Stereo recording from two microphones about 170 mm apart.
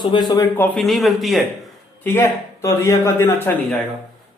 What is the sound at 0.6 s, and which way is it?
Speech, centre (ahead or behind).